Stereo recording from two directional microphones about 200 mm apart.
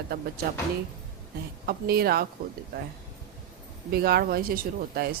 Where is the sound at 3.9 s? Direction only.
50° right (ahead or behind).